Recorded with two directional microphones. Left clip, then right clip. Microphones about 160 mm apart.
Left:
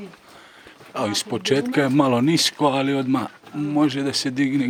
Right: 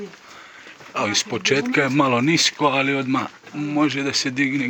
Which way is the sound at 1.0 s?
30° left (ahead or behind).